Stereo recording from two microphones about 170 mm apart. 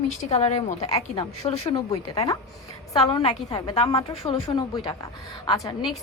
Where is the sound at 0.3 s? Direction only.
40° left (ahead or behind).